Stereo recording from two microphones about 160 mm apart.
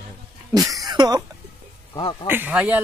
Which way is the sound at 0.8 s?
25° right (ahead or behind).